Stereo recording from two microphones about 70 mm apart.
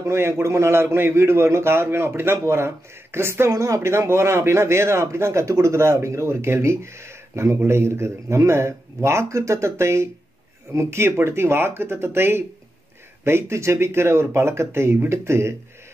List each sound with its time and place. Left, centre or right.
0.0 s a man's voice: right